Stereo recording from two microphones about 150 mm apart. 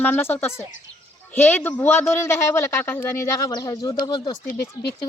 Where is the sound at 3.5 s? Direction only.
25° left (ahead or behind).